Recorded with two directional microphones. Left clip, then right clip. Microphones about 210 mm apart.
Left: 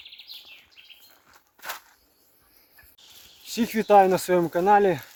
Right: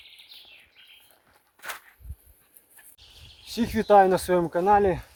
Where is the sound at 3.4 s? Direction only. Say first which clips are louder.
Even; centre (ahead or behind).